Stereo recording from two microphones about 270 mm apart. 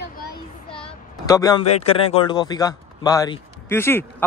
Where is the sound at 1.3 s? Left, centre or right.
Centre.